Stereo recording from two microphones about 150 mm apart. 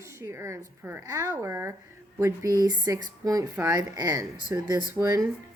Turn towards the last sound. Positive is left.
turn(degrees=-20)  # may be behind; listen again after turning